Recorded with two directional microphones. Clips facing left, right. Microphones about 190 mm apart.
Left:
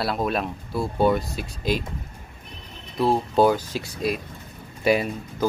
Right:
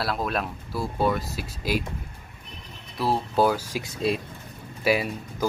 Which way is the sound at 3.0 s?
20° left (ahead or behind).